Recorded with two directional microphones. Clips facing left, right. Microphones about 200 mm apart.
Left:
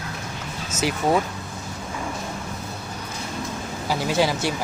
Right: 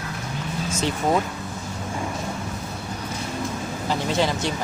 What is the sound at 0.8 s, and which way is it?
Speech, 5° left (ahead or behind).